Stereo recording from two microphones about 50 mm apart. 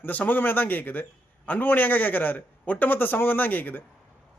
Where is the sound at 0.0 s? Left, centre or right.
Left.